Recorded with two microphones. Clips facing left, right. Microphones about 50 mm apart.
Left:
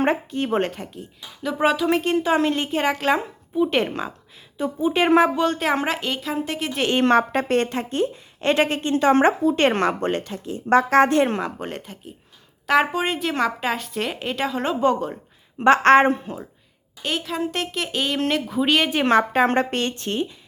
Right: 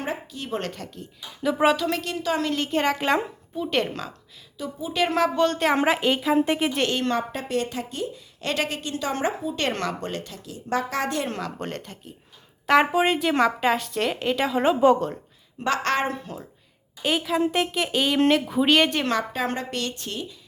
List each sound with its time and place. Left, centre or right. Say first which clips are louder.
0.0 s speech: left 9 dB; left
1.4 s speech: even; centre
1.9 s speech: left 6 dB; left
2.5 s a woman's voice: left 2 dB; centre
4.5 s a woman's voice: left 6 dB; left
5.3 s speech: even; centre
6.9 s a woman's voice: left 8 dB; left
11.5 s a woman's voice: left 1 dB; centre
15.5 s a woman's voice: left 10 dB; left
16.2 s a woman's voice: left 4 dB; centre
17.0 s speech: right 3 dB; centre
19.3 s a woman's voice: left 8 dB; left